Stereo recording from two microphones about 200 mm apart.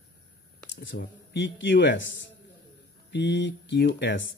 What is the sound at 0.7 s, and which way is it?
Speech, 60° left (ahead or behind).